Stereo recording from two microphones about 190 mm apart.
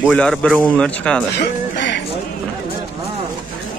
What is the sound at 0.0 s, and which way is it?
Speech, 5° left (ahead or behind).